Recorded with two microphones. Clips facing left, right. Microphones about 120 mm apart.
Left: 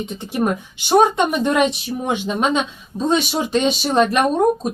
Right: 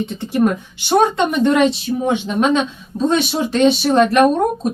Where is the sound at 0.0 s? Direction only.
15° left (ahead or behind).